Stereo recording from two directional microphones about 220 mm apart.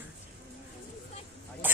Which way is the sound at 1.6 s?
10° right (ahead or behind).